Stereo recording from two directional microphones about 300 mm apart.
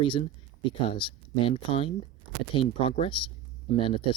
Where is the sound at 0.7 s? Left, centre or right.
Centre.